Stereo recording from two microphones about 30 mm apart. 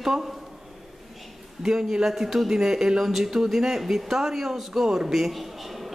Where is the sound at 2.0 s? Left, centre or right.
Centre.